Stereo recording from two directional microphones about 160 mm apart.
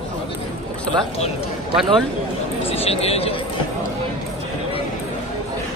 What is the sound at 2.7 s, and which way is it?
Speech, 40° left (ahead or behind).